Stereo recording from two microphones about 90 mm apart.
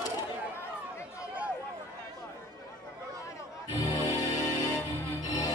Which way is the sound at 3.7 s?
45° left (ahead or behind).